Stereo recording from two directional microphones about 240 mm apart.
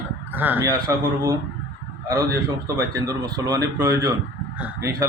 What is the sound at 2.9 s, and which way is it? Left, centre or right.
A man's voice, centre.